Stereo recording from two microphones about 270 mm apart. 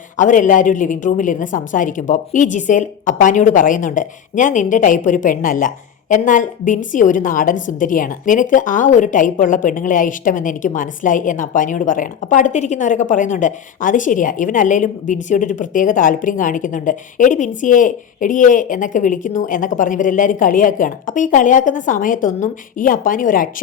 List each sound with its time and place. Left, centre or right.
0.2 s a woman's voice: left